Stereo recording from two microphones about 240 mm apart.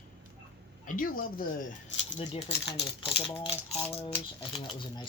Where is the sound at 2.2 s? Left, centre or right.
Left.